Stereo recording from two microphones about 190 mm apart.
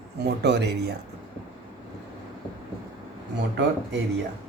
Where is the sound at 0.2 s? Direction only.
60° right (ahead or behind).